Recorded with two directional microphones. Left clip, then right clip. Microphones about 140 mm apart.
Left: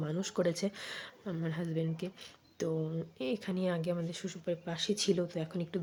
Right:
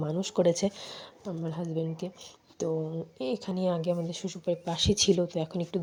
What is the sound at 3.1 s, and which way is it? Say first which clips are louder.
Speech: right 4 dB; 10° right (ahead or behind).